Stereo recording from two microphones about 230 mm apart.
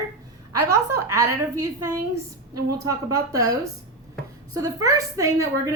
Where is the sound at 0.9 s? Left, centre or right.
Right.